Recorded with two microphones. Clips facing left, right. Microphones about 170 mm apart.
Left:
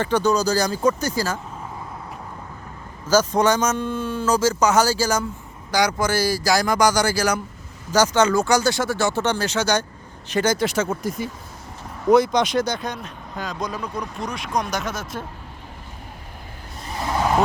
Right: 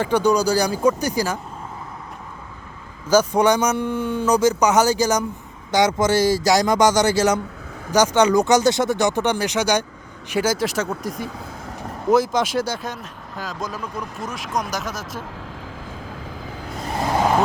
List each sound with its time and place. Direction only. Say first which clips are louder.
0.0 s speech: right 2 dB; 10° right (ahead or behind)
3.1 s speech: right 2 dB; 10° right (ahead or behind)